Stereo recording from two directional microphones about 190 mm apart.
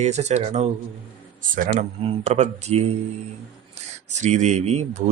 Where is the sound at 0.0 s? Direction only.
35° right (ahead or behind).